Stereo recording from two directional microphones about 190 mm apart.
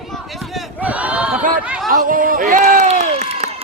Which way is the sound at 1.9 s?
45° right (ahead or behind).